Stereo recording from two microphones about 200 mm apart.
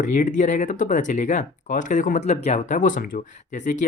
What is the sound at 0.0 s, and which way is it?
Speech, 40° left (ahead or behind).